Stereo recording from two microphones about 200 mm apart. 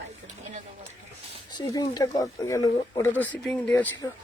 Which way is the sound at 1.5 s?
20° left (ahead or behind).